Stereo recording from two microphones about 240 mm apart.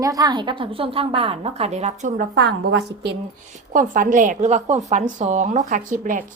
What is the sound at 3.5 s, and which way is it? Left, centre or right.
A woman's voice, right.